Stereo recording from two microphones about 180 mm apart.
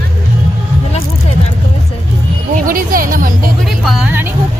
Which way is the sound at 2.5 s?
50° right (ahead or behind).